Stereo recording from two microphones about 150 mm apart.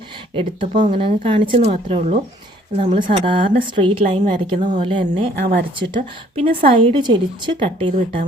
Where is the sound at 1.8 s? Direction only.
45° right (ahead or behind).